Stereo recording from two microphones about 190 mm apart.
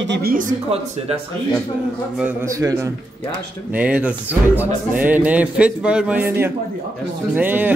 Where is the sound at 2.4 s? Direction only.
15° right (ahead or behind).